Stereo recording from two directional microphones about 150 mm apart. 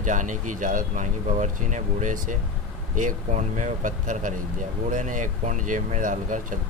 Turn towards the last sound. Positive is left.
turn(degrees=-60)  # may be behind; listen again after turning